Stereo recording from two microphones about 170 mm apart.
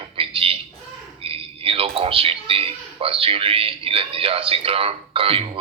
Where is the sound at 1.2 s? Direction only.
35° right (ahead or behind).